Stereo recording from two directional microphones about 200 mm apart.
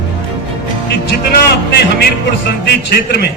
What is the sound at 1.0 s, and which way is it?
A man's voice, 55° left (ahead or behind).